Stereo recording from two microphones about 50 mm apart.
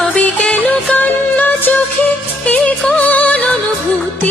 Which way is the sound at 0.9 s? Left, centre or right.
Left.